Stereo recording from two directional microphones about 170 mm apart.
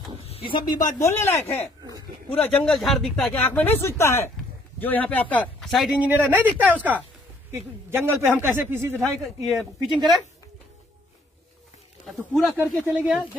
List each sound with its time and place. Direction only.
0.2 s a sound: 35° left (ahead or behind)
1.0 s a man's voice: 15° left (ahead or behind); by 9.0 s 10° right (ahead or behind)
9.2 s speech: centre (ahead or behind)
12.4 s a man's voice: centre (ahead or behind)